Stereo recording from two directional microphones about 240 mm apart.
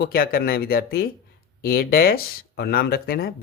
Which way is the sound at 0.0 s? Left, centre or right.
Left.